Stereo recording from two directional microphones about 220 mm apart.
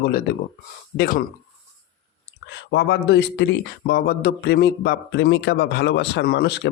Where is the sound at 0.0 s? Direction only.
40° left (ahead or behind).